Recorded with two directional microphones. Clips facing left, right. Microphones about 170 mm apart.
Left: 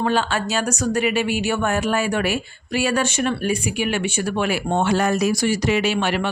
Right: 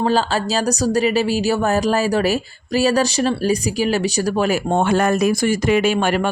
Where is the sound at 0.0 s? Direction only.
35° right (ahead or behind).